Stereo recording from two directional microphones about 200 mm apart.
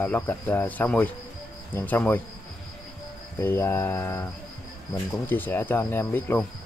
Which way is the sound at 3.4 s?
10° left (ahead or behind).